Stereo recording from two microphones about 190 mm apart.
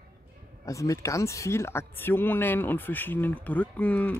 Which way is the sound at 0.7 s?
15° left (ahead or behind).